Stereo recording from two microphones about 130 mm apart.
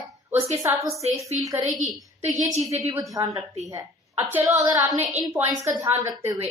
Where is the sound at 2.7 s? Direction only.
25° right (ahead or behind).